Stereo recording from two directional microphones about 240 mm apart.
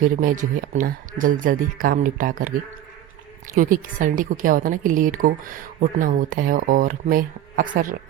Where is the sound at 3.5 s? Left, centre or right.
Right.